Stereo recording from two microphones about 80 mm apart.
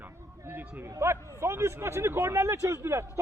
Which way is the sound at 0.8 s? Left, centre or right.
Right.